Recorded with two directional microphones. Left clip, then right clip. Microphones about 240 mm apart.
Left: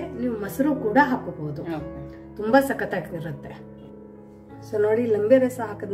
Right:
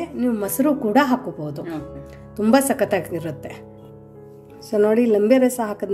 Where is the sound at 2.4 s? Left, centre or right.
Right.